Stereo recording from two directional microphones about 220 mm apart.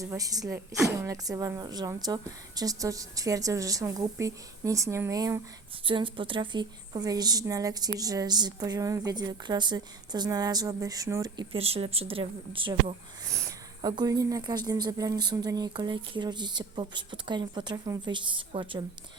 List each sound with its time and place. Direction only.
0.0 s a woman's voice: 15° right (ahead or behind)